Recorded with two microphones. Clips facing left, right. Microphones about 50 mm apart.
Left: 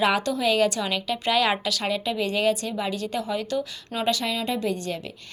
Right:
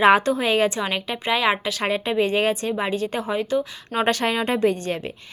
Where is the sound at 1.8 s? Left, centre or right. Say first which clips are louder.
Right 4 dB; right.